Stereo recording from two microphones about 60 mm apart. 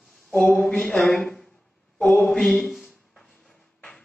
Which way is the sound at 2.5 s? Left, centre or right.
Centre.